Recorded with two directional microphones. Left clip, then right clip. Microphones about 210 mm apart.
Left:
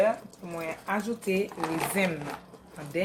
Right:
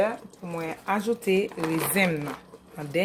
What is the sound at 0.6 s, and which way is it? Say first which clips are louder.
Speech: right 3 dB; 45° right (ahead or behind).